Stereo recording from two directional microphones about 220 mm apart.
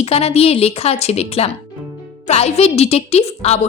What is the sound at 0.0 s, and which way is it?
A woman's voice, 30° left (ahead or behind).